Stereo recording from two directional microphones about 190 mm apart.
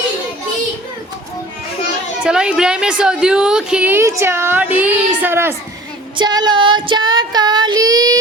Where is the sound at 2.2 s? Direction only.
5° right (ahead or behind).